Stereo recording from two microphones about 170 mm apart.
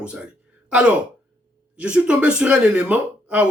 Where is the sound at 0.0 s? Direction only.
5° right (ahead or behind).